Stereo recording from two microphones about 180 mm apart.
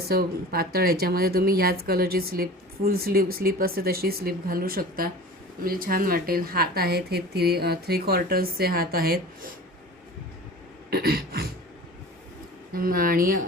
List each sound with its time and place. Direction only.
0.0 s speech: 60° right (ahead or behind)
10.9 s speech: 60° right (ahead or behind)
12.7 s speech: 55° right (ahead or behind)